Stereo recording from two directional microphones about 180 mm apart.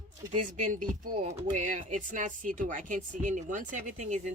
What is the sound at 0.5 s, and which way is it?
Speech, 45° right (ahead or behind).